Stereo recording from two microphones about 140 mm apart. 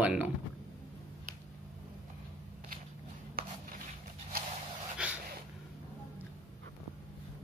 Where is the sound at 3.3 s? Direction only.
90° right.